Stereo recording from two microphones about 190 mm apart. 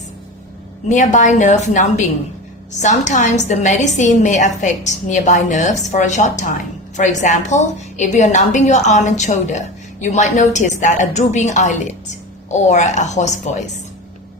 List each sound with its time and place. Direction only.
0.9 s a woman's voice: 40° left (ahead or behind)